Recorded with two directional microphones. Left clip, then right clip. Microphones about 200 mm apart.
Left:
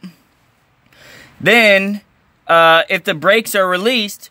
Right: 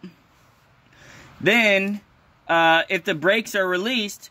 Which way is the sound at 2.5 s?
45° left (ahead or behind).